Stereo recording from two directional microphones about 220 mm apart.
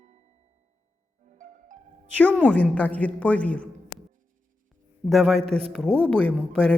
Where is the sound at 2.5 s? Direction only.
5° left (ahead or behind).